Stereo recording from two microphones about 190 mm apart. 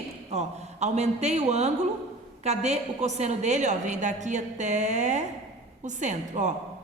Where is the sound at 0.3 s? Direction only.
35° right (ahead or behind).